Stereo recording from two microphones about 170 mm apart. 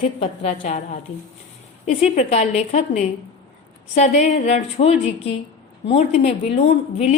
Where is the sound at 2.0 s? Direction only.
45° left (ahead or behind).